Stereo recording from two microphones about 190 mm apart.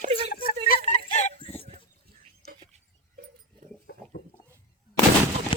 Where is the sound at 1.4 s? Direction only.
30° left (ahead or behind).